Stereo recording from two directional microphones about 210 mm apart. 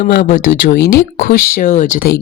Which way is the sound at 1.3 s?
35° left (ahead or behind).